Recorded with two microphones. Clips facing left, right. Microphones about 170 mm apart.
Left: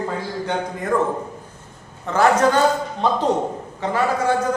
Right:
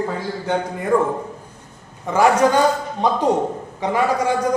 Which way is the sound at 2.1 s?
10° right (ahead or behind).